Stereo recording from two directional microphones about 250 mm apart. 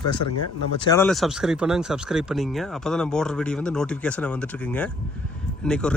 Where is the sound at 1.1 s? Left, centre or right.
Centre.